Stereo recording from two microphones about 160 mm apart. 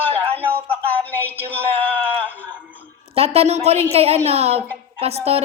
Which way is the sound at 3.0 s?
40° right (ahead or behind).